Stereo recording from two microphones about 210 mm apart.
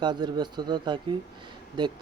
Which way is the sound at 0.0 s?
20° right (ahead or behind).